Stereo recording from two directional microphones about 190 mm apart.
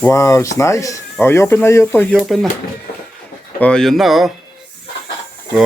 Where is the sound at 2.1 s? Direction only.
Centre (ahead or behind).